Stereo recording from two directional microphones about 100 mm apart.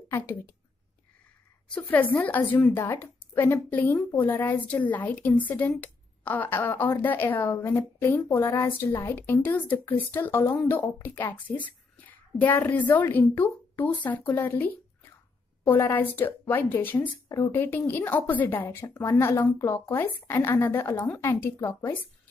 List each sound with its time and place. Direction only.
1.7 s a woman's voice: 15° left (ahead or behind)